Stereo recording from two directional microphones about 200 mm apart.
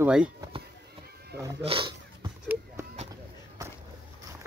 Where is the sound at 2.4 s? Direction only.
5° right (ahead or behind).